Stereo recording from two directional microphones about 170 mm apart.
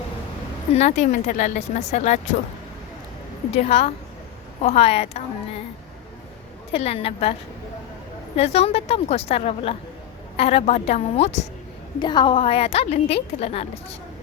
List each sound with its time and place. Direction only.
0.7 s a woman's voice: 40° left (ahead or behind)
3.5 s a woman's voice: 40° left (ahead or behind)
6.7 s a woman's voice: 35° left (ahead or behind)
8.4 s a woman's voice: 35° left (ahead or behind)
11.9 s a woman's voice: 25° left (ahead or behind)